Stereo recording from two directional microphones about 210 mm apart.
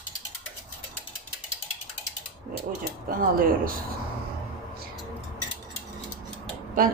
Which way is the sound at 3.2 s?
45° right (ahead or behind).